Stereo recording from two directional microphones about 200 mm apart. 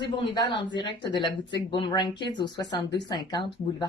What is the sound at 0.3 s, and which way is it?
Speech, 25° left (ahead or behind).